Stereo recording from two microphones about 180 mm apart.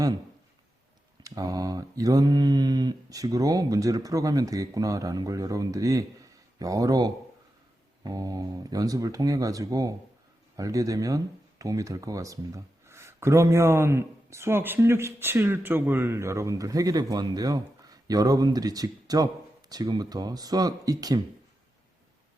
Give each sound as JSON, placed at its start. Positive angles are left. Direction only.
{"t": 1.2, "sound": "speech", "side_deg": -20}